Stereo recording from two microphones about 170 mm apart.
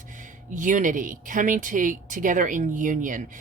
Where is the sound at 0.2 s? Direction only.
50° right (ahead or behind).